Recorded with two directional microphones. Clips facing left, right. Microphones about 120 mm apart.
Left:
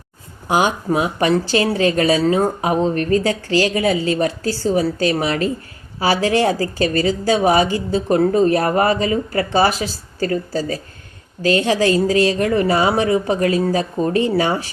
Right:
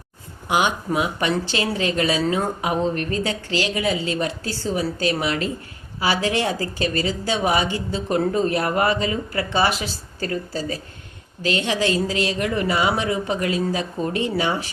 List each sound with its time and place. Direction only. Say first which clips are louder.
0.4 s a woman's voice: left 4 dB; 40° left (ahead or behind)